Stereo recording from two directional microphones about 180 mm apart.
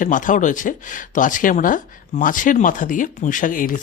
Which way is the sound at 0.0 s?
45° left (ahead or behind).